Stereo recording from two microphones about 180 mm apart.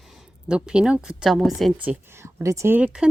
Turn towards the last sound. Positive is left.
turn(degrees=-10)  # may be behind; listen again after turning